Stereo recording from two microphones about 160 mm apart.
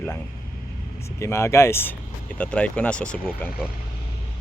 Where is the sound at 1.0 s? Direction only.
15° left (ahead or behind).